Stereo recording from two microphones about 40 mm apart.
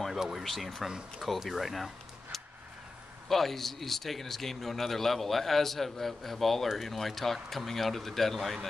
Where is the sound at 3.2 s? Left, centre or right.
Centre.